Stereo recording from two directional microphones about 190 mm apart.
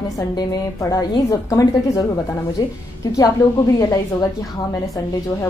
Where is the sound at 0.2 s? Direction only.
20° left (ahead or behind).